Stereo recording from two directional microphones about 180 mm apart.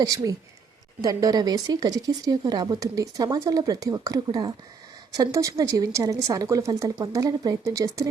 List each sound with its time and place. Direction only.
0.0 s speech: 20° right (ahead or behind)